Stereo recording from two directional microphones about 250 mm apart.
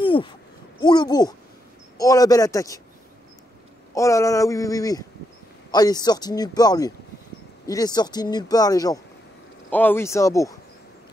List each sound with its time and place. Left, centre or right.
0.0 s a sound: centre
0.7 s a man's voice: centre
3.9 s a man's voice: centre